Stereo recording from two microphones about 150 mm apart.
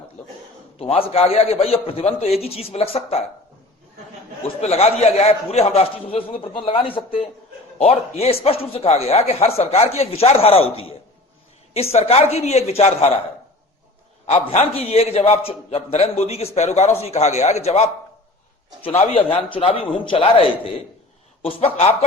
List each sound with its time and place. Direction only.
0.8 s a man's voice: 40° left (ahead or behind)
4.6 s a man's voice: 45° left (ahead or behind)
14.3 s a man's voice: 45° left (ahead or behind)